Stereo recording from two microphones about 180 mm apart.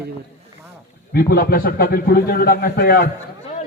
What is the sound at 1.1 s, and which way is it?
A man's voice, 55° left (ahead or behind).